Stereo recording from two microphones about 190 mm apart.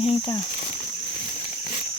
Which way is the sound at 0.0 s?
30° left (ahead or behind).